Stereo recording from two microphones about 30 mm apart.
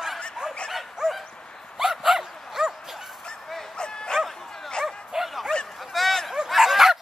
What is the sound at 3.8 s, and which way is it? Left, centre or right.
Bow-wow, left.